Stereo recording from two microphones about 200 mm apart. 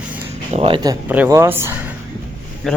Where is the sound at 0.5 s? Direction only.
25° right (ahead or behind).